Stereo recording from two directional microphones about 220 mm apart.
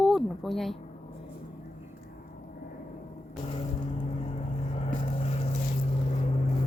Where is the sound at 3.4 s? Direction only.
25° left (ahead or behind).